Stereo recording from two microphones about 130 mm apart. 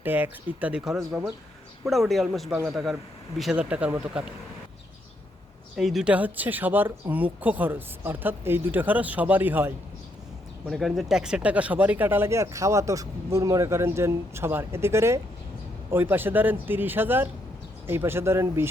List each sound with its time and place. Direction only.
0.0 s a man's voice: 15° right (ahead or behind)
5.7 s speech: centre (ahead or behind)
10.7 s speech: centre (ahead or behind); by 18.7 s 20° right (ahead or behind)